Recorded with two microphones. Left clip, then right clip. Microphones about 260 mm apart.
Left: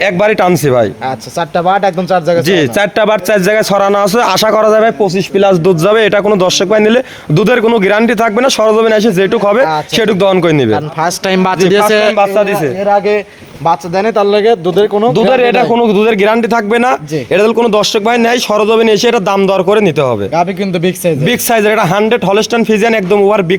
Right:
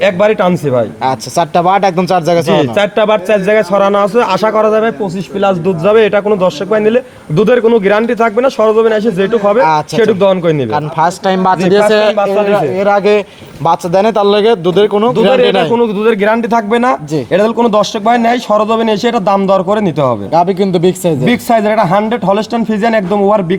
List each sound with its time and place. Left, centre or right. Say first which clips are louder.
0.0 s speech: even; left
1.0 s speech: right 4 dB; centre
2.5 s speech: even; left
11.3 s speech: left 3 dB; left
12.8 s a man's voice: left 1 dB; centre
15.7 s speech: left 2 dB; left
20.4 s speech: right 2 dB; centre
21.2 s speech: left 1 dB; left